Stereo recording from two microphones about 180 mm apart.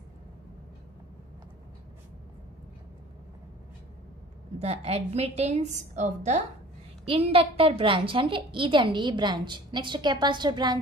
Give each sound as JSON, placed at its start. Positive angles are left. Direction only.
{"t": 4.6, "sound": "a woman's voice", "side_deg": -35}